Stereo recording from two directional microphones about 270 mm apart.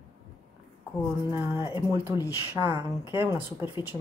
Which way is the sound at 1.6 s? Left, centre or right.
Centre.